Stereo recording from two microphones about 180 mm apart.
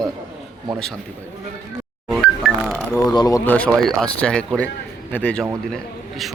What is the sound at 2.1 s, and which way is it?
Music, centre (ahead or behind).